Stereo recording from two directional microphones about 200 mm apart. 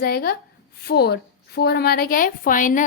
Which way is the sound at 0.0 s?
50° left (ahead or behind).